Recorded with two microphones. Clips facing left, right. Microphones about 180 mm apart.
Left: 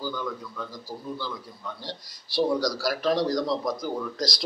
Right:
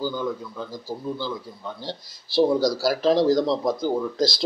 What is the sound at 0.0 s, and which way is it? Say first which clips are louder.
A man's voice: right 5 dB; 25° right (ahead or behind).